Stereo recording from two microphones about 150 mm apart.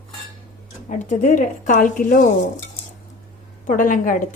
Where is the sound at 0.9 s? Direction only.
55° left (ahead or behind).